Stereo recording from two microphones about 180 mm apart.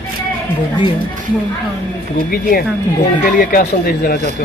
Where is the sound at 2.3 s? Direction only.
55° left (ahead or behind).